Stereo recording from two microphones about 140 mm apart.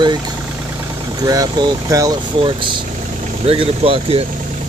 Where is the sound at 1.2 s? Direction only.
25° right (ahead or behind).